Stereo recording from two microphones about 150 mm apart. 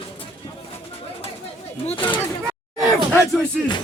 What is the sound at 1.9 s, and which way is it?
Speech, 35° left (ahead or behind).